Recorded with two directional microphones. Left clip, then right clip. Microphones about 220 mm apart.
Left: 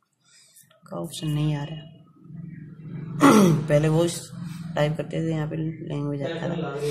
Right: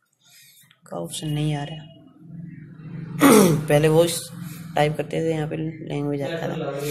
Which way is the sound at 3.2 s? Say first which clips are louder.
Right 2 dB; centre (ahead or behind).